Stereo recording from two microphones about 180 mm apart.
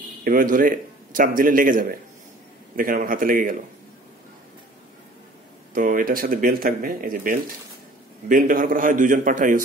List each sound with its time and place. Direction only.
0.2 s a man's voice: 50° right (ahead or behind)
5.8 s a man's voice: 50° right (ahead or behind)